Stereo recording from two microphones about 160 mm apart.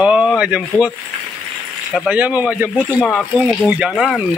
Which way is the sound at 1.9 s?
5° right (ahead or behind).